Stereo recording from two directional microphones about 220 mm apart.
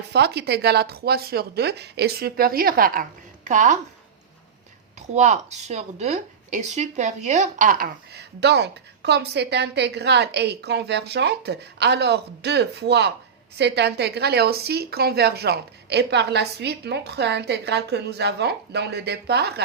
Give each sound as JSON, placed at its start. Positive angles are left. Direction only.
{"t": 0.1, "sound": "a woman's voice", "side_deg": -50}
{"t": 5.0, "sound": "a woman's voice", "side_deg": -30}